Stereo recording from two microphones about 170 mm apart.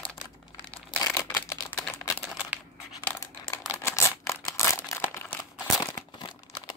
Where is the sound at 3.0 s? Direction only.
10° left (ahead or behind).